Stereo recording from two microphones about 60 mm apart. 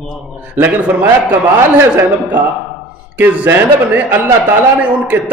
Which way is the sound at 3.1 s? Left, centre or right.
Right.